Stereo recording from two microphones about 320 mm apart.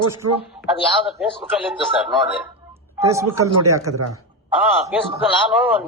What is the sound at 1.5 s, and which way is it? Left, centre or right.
A man's voice, centre.